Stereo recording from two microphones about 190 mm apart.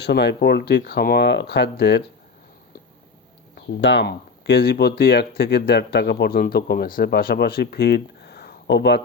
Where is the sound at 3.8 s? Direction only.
70° left (ahead or behind).